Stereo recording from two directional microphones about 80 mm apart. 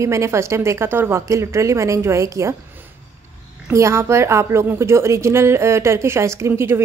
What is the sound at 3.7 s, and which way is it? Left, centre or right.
A woman's voice, right.